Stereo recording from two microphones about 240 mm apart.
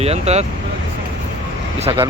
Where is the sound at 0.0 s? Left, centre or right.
Right.